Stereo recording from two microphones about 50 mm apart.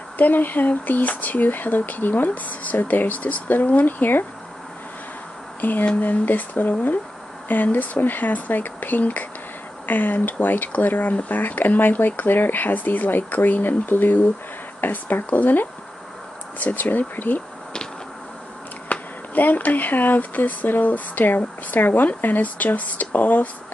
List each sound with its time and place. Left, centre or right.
0.2 s speech: left
5.6 s a sound: left
5.9 s speech: left
18.9 s speech: left